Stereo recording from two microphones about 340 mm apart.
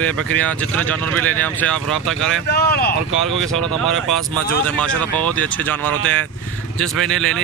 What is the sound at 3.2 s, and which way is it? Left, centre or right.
Speech, centre.